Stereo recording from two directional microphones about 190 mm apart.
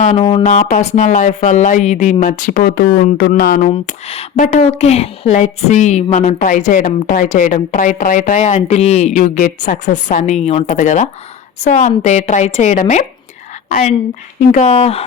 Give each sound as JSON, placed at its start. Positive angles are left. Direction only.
{"t": 0.0, "sound": "speech", "side_deg": 35}
{"t": 3.7, "sound": "speech", "side_deg": 30}